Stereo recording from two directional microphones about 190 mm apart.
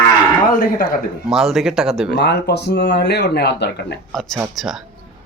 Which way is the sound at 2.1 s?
60° left (ahead or behind).